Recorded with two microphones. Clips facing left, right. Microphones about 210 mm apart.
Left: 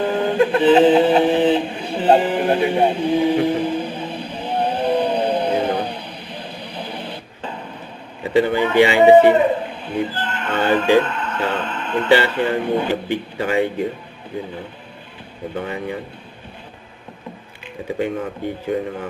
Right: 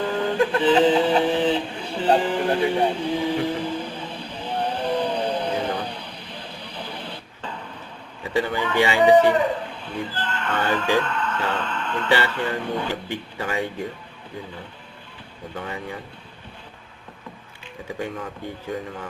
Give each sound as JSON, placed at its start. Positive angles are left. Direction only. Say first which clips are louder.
{"t": 0.0, "sound": "a sound", "louder": "left 4 dB", "side_deg": 20}
{"t": 8.4, "sound": "speech", "louder": "left 7 dB", "side_deg": 25}
{"t": 15.5, "sound": "speech", "louder": "left 6 dB", "side_deg": 25}